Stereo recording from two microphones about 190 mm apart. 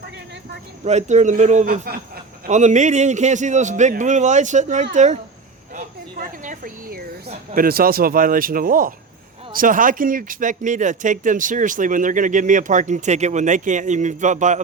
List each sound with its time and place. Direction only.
0.9 s speech: 35° right (ahead or behind)
6.4 s speech: 45° right (ahead or behind)